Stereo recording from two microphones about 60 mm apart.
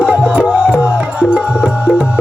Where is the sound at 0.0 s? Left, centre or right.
Centre.